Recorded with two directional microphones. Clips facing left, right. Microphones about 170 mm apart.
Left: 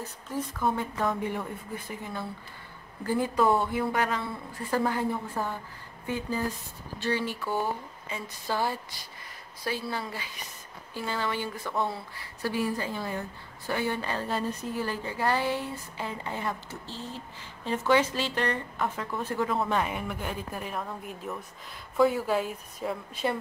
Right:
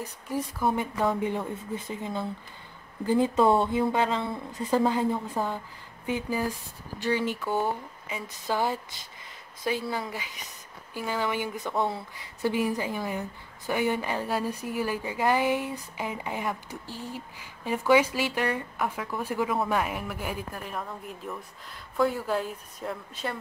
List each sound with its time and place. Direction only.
0.0 s a woman's voice: 10° right (ahead or behind)
21.9 s speech: 5° left (ahead or behind)